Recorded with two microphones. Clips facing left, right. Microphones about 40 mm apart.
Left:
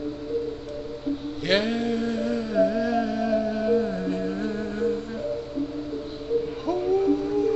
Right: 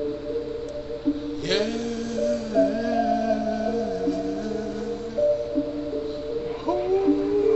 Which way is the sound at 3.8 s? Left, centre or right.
Left.